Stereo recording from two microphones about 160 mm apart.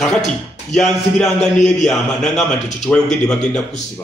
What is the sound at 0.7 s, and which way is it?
A man's voice, 5° left (ahead or behind).